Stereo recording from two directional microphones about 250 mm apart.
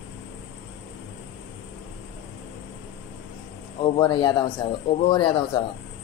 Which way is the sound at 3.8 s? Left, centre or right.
Centre.